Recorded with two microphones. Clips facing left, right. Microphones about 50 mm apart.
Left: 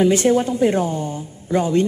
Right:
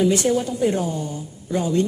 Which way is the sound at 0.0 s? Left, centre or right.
Left.